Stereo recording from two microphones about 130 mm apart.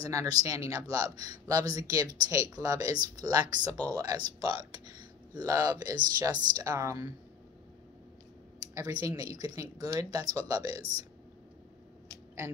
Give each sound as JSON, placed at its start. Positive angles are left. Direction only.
{"t": 0.0, "sound": "speech", "side_deg": -25}
{"t": 8.7, "sound": "speech", "side_deg": -25}